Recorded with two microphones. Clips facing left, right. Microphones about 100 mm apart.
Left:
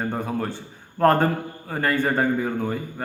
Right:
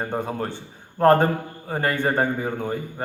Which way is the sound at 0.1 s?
20° right (ahead or behind).